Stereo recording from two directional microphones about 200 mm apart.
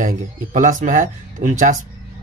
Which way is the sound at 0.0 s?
40° right (ahead or behind).